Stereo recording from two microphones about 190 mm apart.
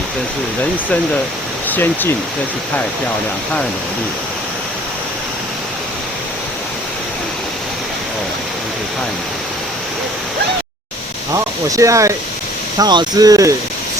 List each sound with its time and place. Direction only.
1.7 s speech: 10° left (ahead or behind)
11.7 s speech: 15° right (ahead or behind)